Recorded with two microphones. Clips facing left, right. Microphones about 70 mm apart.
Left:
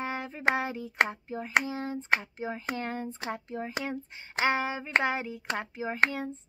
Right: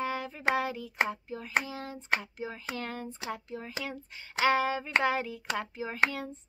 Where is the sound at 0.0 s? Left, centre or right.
Left.